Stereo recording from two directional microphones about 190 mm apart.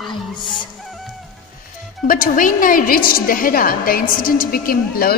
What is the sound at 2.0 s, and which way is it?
A woman's voice, 50° left (ahead or behind).